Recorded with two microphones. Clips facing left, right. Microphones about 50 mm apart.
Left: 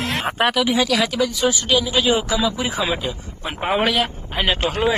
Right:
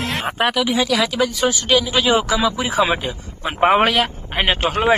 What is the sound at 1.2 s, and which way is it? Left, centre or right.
Speech, right.